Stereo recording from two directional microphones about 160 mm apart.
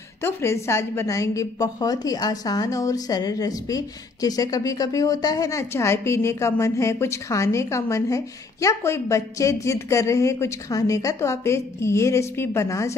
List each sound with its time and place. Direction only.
0.2 s a woman's voice: 15° left (ahead or behind)